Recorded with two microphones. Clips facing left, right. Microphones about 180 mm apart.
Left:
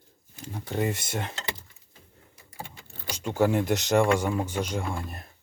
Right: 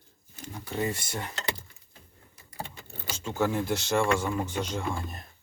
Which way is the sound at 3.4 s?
15° left (ahead or behind).